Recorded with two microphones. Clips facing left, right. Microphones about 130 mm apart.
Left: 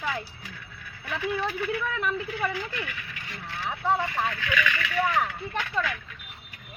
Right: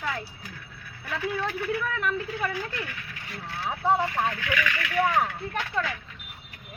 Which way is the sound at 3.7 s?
15° right (ahead or behind).